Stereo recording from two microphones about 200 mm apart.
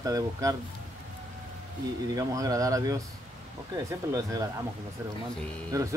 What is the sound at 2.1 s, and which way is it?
Speech, 15° right (ahead or behind).